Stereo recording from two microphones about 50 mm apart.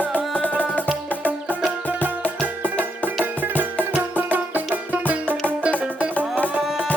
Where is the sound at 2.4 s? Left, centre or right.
Right.